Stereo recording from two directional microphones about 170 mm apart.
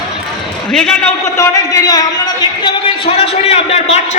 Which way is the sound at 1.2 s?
20° left (ahead or behind).